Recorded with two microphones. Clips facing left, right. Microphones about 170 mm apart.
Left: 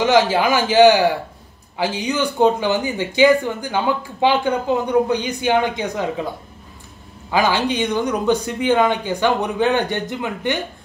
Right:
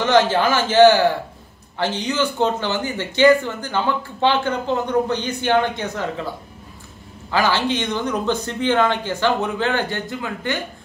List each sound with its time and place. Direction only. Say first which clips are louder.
0.0 s speech: left 1 dB; 10° left (ahead or behind)
7.2 s speech: left 1 dB; 15° left (ahead or behind)